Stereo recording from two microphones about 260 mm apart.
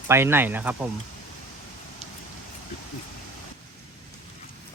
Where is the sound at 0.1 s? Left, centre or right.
Centre.